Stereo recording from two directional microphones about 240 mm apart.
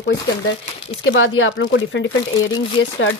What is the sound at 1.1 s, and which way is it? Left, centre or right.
Speech, left.